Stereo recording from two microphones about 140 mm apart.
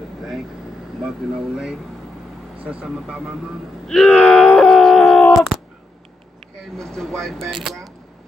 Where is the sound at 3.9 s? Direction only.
5° left (ahead or behind).